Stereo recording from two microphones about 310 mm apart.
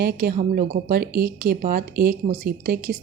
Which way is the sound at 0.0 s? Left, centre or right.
Right.